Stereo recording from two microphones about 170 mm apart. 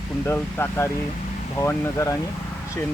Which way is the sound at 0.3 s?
10° left (ahead or behind).